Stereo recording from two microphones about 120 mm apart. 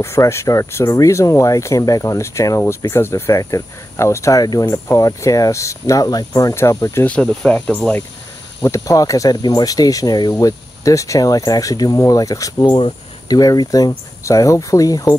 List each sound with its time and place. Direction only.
0.0 s speech: 25° left (ahead or behind)
7.1 s speech: 10° left (ahead or behind)
8.5 s speech: 25° left (ahead or behind)
12.7 s cricket: 40° left (ahead or behind)
13.4 s speech: 30° left (ahead or behind)